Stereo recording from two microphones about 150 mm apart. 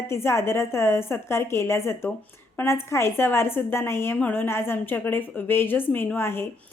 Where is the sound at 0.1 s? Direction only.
15° left (ahead or behind).